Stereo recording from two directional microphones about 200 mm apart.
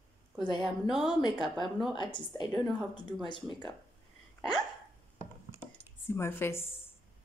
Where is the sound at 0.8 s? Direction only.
Centre (ahead or behind).